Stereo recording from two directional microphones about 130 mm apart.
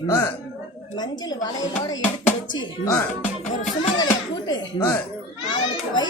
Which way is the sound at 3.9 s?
30° left (ahead or behind).